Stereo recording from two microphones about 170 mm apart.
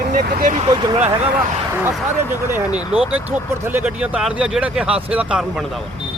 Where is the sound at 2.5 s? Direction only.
10° right (ahead or behind).